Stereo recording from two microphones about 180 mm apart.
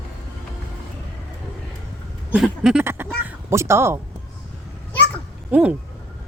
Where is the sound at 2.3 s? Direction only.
5° right (ahead or behind).